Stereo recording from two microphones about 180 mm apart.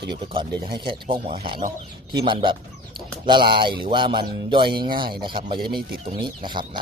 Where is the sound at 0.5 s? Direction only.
60° right (ahead or behind).